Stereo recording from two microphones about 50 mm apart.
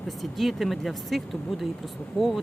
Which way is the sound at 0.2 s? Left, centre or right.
Centre.